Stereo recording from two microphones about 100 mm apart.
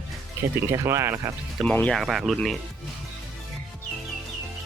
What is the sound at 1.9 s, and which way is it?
Speech, centre (ahead or behind).